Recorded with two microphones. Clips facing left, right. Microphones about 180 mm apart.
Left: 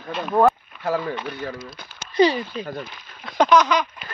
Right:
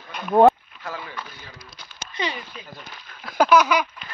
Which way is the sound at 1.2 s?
65° left (ahead or behind).